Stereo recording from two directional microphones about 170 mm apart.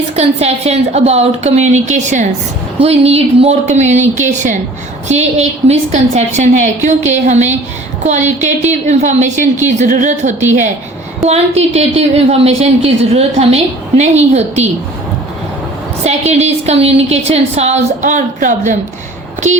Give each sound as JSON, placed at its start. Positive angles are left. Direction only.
{"t": 0.2, "sound": "a woman's voice", "side_deg": -40}
{"t": 16.0, "sound": "a woman's voice", "side_deg": -40}